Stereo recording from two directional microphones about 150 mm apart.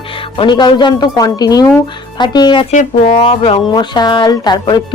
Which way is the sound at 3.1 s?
35° left (ahead or behind).